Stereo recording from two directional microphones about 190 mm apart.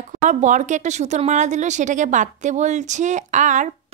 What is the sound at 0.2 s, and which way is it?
Speech, 40° right (ahead or behind).